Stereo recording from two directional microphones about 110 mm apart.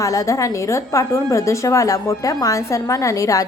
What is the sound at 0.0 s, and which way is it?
A woman's voice, 30° left (ahead or behind).